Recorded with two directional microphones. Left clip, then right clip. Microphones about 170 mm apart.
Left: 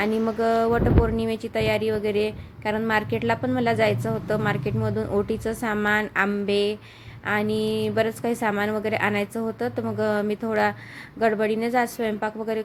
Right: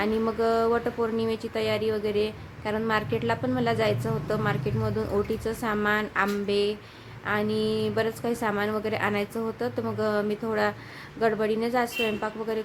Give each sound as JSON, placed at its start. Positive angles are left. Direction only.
{"t": 0.0, "sound": "speech", "side_deg": 20}